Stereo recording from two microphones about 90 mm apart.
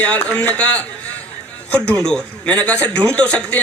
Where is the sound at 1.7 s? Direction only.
10° left (ahead or behind).